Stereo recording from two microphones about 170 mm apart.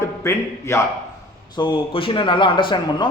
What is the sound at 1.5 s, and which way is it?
Speech, 30° left (ahead or behind).